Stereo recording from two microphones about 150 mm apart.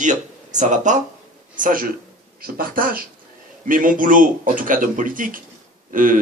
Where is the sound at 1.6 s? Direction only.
70° right (ahead or behind).